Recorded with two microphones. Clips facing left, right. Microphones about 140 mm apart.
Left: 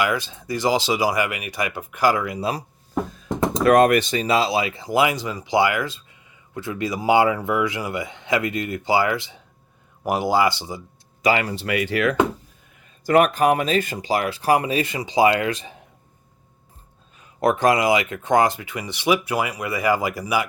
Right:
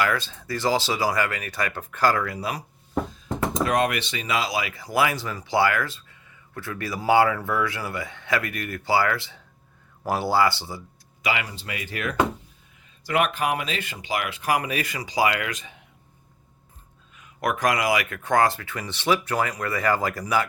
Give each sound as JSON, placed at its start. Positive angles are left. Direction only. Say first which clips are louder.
{"t": 0.0, "sound": "speech", "louder": "left 2 dB", "side_deg": 15}
{"t": 2.4, "sound": "speech", "louder": "left 5 dB", "side_deg": 30}
{"t": 3.6, "sound": "speech", "louder": "left 9 dB", "side_deg": 55}
{"t": 11.2, "sound": "speech", "louder": "left 7 dB", "side_deg": 40}
{"t": 11.4, "sound": "speech", "louder": "left 11 dB", "side_deg": 70}
{"t": 13.1, "sound": "speech", "louder": "left 7 dB", "side_deg": 40}
{"t": 17.2, "sound": "speech", "louder": "left 6 dB", "side_deg": 30}